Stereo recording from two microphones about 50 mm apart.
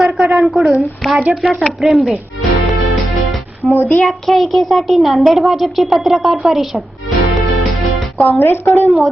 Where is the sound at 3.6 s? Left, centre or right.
Centre.